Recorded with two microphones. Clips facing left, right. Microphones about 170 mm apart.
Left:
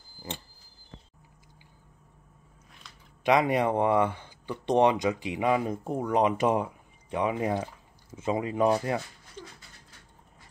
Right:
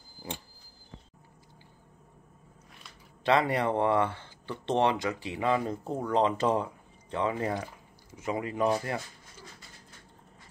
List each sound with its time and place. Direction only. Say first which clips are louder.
3.3 s speech: left 2 dB; 15° left (ahead or behind)
9.4 s dog: left 7 dB; 10° right (ahead or behind)